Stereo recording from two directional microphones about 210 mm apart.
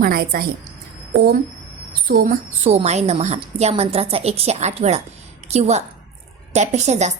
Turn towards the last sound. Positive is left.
turn(degrees=-35)  # may be behind; listen again after turning